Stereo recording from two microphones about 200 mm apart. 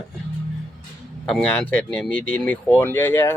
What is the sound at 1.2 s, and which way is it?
Speech, 5° left (ahead or behind).